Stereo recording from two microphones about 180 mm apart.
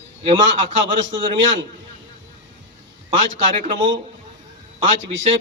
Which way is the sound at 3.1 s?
45° right (ahead or behind).